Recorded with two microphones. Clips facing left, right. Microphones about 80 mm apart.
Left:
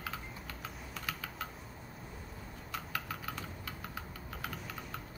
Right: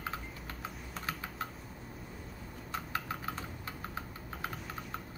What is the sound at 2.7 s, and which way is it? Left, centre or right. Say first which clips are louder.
Typing: right 3 dB; right.